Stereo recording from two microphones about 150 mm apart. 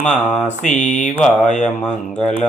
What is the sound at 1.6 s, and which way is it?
Speech, 5° left (ahead or behind).